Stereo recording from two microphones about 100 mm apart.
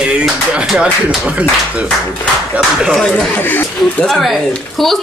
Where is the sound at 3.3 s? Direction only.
15° left (ahead or behind).